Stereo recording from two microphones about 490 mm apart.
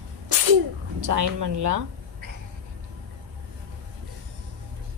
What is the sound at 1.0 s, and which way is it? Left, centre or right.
Speech, right.